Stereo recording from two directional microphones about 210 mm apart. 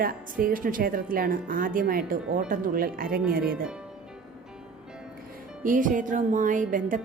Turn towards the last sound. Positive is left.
turn(degrees=-40)  # may be behind; listen again after turning